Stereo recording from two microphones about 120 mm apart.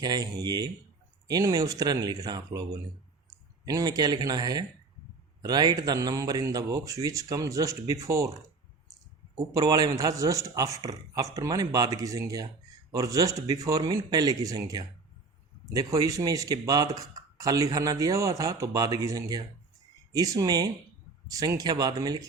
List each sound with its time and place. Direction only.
0.0 s speech: 35° right (ahead or behind)